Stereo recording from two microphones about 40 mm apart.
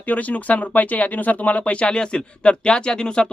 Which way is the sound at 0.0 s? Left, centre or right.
Left.